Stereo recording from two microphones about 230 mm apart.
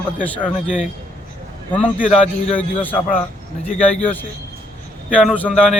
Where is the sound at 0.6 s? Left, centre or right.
Left.